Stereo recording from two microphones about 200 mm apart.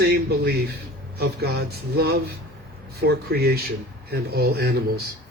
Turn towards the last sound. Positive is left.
turn(degrees=-50)  # may be behind; listen again after turning